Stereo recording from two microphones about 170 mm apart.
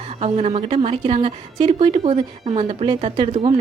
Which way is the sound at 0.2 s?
40° right (ahead or behind).